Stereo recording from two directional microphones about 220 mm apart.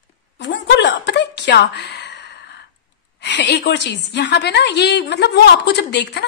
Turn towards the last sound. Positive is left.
turn(degrees=50)  # may be behind; listen again after turning